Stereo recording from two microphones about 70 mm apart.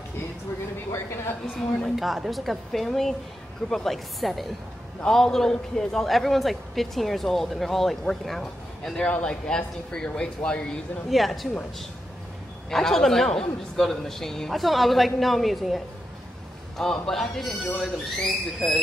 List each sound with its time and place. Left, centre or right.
0.9 s speech: left
2.0 s a man's voice: centre
11.1 s a man's voice: centre
12.6 s a man's voice: centre